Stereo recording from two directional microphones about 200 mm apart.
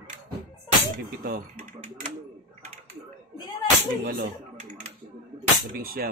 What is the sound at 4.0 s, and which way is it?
Speech, 45° right (ahead or behind).